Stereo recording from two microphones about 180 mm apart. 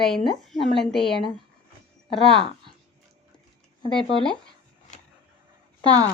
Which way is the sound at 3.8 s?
30° left (ahead or behind).